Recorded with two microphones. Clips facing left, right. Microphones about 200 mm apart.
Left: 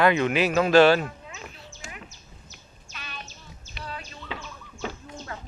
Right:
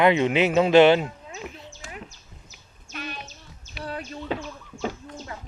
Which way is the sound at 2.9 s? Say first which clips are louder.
Right 7 dB; 55° right (ahead or behind).